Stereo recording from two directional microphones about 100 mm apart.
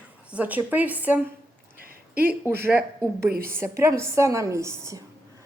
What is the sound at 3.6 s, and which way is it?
A woman's voice, 30° right (ahead or behind).